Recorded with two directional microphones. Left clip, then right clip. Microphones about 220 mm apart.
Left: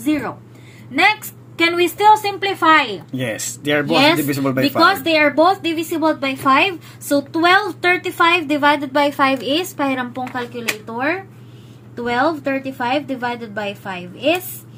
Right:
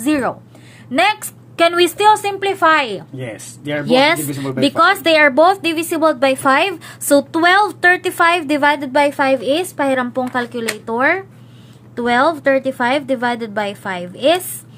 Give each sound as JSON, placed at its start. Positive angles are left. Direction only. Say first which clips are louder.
{"t": 0.0, "sound": "a woman's voice", "louder": "right 4 dB", "side_deg": -45}
{"t": 3.2, "sound": "speech", "louder": "left 5 dB", "side_deg": 30}
{"t": 4.2, "sound": "speech", "louder": "left 4 dB", "side_deg": 40}
{"t": 4.6, "sound": "a woman's voice", "louder": "right 2 dB", "side_deg": -45}